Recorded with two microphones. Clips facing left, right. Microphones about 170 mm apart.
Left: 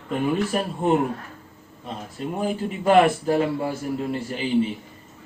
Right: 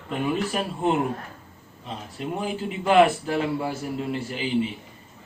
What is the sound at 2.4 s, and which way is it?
A man's voice, 45° left (ahead or behind).